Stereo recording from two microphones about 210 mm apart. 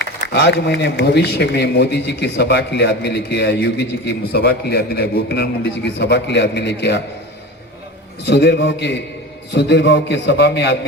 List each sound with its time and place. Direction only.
0.0 s a man's voice: 55° left (ahead or behind)
8.3 s a man's voice: 55° left (ahead or behind)